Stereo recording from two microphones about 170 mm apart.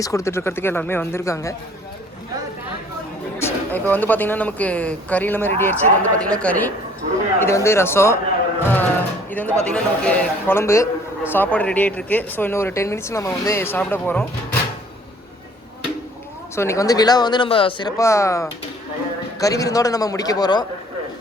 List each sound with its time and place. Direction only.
0.0 s a man's voice: 20° left (ahead or behind)
3.3 s a man's voice: 15° left (ahead or behind)
8.7 s music: 10° left (ahead or behind)
9.6 s a man's voice: 5° left (ahead or behind)
16.6 s speech: 15° left (ahead or behind)